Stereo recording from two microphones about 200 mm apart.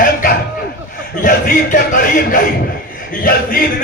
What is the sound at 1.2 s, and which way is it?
A man's voice, 40° left (ahead or behind).